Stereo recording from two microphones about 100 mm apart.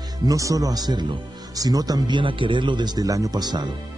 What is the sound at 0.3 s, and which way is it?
Speech, 35° right (ahead or behind).